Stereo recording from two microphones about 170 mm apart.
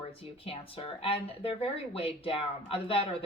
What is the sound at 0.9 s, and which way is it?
Speech, 35° left (ahead or behind).